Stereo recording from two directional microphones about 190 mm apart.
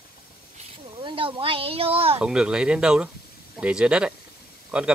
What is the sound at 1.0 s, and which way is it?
Speech, 25° right (ahead or behind).